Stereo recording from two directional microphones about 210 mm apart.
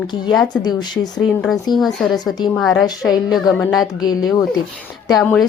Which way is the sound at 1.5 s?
20° left (ahead or behind).